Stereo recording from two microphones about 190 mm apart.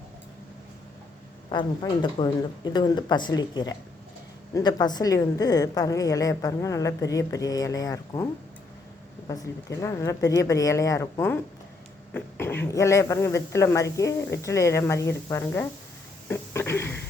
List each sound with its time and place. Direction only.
1.5 s a woman's voice: 25° left (ahead or behind)